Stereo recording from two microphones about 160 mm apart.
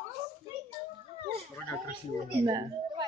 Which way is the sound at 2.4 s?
25° right (ahead or behind).